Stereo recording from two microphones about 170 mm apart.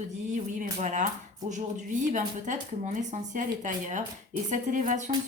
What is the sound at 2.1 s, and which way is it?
Speech, 45° right (ahead or behind).